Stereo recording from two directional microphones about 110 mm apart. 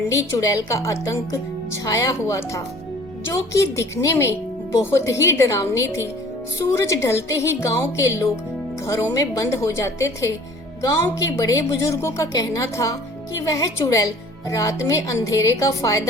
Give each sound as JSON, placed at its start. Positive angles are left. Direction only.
{"t": 0.1, "sound": "a woman's voice", "side_deg": 30}